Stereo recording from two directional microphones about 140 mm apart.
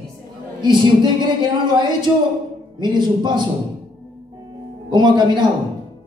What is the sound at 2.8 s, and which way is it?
Speech, 30° right (ahead or behind).